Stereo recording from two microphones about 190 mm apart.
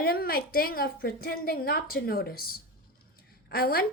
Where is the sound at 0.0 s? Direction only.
55° left (ahead or behind).